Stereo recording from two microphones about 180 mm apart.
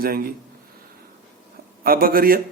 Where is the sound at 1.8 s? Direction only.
55° right (ahead or behind).